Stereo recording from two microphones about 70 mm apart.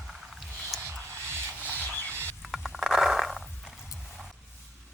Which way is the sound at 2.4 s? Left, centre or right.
Centre.